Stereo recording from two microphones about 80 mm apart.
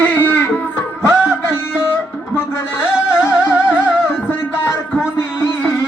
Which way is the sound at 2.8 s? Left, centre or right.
Left.